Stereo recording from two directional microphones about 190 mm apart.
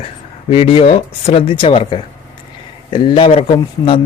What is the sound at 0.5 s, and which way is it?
A man's voice, 30° left (ahead or behind).